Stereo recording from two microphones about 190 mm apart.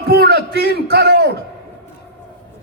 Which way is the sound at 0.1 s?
60° right (ahead or behind).